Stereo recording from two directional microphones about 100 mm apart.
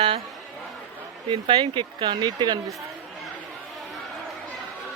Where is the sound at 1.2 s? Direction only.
55° right (ahead or behind).